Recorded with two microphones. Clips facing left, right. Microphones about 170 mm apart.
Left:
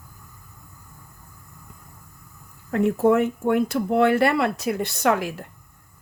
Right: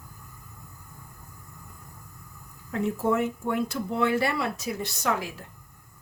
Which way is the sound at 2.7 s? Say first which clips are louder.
Left 7 dB; 65° left (ahead or behind).